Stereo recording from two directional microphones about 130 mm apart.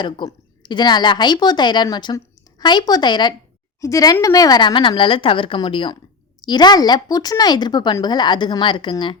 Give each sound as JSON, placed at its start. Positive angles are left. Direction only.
{"t": 0.0, "sound": "a woman's voice", "side_deg": 35}